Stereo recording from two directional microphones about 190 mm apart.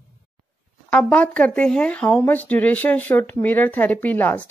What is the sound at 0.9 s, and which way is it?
Speech, 5° left (ahead or behind).